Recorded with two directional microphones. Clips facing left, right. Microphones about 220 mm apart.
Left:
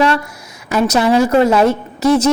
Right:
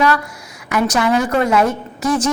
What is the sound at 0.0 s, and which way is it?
A woman's voice, 25° left (ahead or behind).